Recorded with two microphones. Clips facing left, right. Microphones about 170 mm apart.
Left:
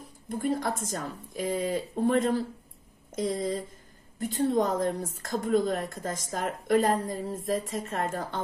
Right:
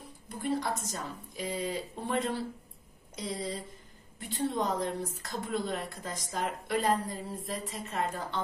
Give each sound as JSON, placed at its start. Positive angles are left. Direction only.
{"t": 0.3, "sound": "a woman's voice", "side_deg": 45}